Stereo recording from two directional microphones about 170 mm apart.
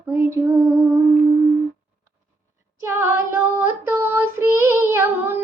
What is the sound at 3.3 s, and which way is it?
Child singing, 10° right (ahead or behind).